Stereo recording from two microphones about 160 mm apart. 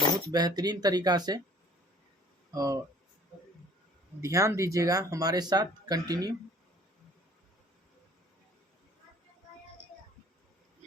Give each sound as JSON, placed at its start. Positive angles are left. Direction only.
{"t": 0.3, "sound": "speech", "side_deg": -25}
{"t": 2.5, "sound": "speech", "side_deg": -20}
{"t": 4.2, "sound": "speech", "side_deg": -20}